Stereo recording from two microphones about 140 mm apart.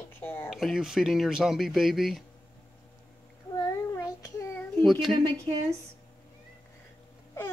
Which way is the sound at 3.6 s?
25° left (ahead or behind).